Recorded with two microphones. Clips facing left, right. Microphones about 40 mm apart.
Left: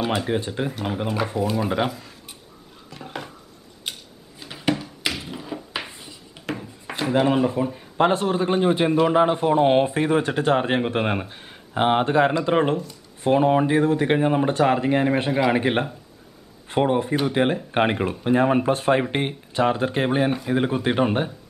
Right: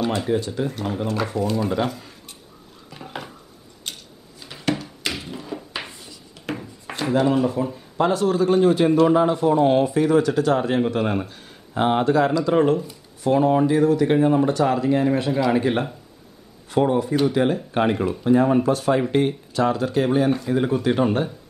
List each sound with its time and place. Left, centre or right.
0.3 s speech: left
0.7 s speech: centre
1.9 s speech: centre
2.9 s dishes: centre
3.9 s tick-tock: centre
4.4 s thunk: centre
6.4 s a sound: centre
7.2 s speech: left
9.1 s speech: left